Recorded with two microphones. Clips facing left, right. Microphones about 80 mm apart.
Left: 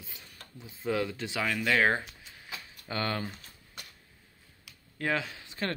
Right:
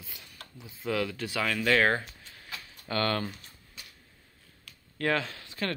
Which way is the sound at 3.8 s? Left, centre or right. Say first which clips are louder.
Left 3 dB; left.